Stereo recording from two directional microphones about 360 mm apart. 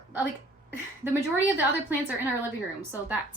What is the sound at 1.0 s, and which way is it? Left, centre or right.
A woman's voice, centre.